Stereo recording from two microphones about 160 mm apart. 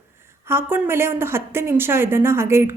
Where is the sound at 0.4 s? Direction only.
15° right (ahead or behind).